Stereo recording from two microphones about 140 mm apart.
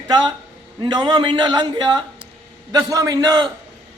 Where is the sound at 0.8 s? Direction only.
30° right (ahead or behind).